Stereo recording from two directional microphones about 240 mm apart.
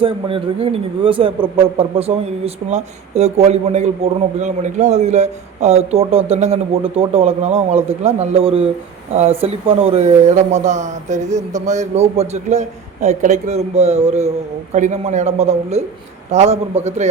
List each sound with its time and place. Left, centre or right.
0.0 s speech: right